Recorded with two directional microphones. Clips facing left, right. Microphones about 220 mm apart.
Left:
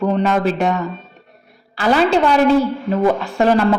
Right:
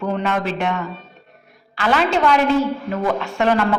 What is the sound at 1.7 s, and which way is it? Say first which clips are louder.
A woman's voice: left 4 dB; 35° left (ahead or behind).